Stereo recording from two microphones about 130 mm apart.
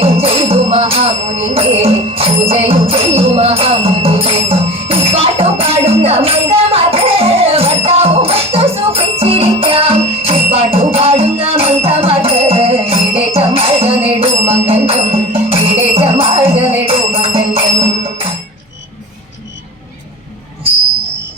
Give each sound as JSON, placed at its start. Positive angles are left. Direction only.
{"t": 0.0, "sound": "music", "side_deg": -50}